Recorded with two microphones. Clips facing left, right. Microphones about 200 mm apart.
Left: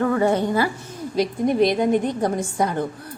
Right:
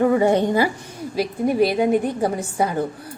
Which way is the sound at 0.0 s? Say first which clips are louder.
Right 3 dB; 15° right (ahead or behind).